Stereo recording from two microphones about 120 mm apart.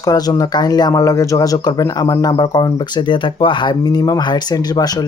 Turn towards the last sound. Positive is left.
turn(degrees=35)  # may be behind; listen again after turning